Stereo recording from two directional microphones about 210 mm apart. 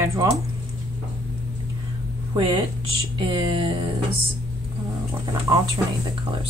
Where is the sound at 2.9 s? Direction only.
20° right (ahead or behind).